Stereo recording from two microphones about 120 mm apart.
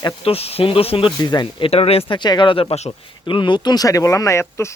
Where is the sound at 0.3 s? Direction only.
55° left (ahead or behind).